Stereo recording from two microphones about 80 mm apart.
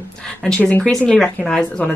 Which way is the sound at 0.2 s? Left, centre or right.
Centre.